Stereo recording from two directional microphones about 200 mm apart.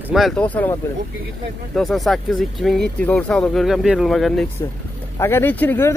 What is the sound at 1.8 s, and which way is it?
Speech, centre (ahead or behind).